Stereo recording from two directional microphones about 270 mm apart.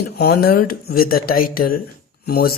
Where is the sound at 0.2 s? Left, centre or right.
Left.